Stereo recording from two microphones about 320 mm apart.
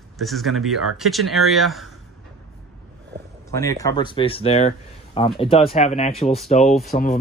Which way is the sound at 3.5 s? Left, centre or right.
Centre.